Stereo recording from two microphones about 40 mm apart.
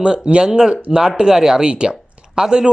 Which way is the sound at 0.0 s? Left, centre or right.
Right.